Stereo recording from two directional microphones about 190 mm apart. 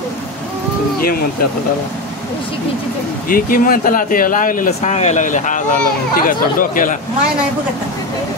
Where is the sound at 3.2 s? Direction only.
45° left (ahead or behind).